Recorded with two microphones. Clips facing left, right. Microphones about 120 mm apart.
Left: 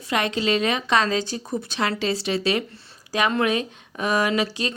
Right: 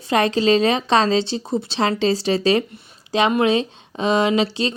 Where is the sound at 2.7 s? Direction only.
20° right (ahead or behind).